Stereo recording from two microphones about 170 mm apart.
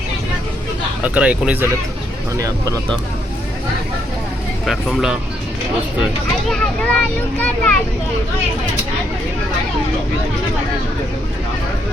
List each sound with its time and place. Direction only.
1.0 s speech: 10° right (ahead or behind)
2.3 s speech: 20° right (ahead or behind)
4.6 s a child's voice: centre (ahead or behind)
6.5 s a child's voice: 5° left (ahead or behind)